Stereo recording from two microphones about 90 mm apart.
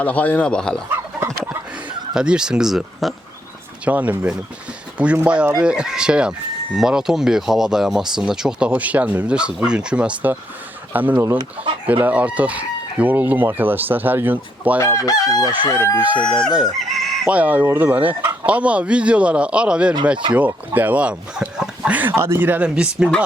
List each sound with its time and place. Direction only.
0.0 s speech: 20° left (ahead or behind)
2.1 s speech: 10° right (ahead or behind)
3.8 s speech: 15° right (ahead or behind)
10.9 s chicken: 20° right (ahead or behind)
11.3 s speech: 75° right (ahead or behind)
11.9 s chicken: 15° right (ahead or behind)
14.8 s chicken: 35° left (ahead or behind)
15.7 s chicken: 30° left (ahead or behind)
16.1 s speech: 55° left (ahead or behind)
16.5 s chicken: 5° right (ahead or behind)
17.7 s speech: 20° right (ahead or behind)